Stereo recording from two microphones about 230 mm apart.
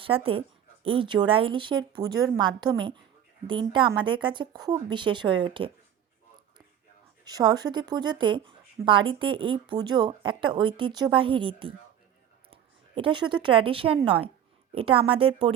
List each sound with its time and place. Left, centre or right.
0.0 s speech: right
7.3 s speech: centre
13.0 s speech: right